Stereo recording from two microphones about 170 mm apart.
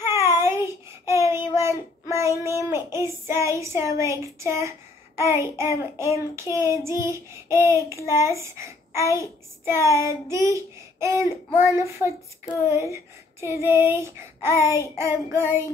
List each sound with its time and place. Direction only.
0.0 s child singing: 15° right (ahead or behind)
4.0 s a woman's voice: 15° right (ahead or behind)
5.6 s child singing: 15° right (ahead or behind)